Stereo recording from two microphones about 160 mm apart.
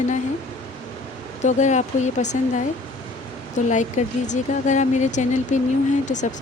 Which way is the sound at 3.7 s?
50° left (ahead or behind).